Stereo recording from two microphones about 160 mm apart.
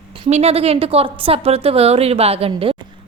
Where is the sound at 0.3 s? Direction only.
40° right (ahead or behind).